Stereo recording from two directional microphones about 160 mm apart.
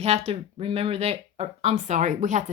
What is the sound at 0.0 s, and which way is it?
Speech, 40° right (ahead or behind).